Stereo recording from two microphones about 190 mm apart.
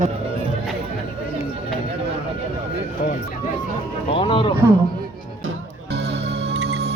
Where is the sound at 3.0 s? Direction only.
50° left (ahead or behind).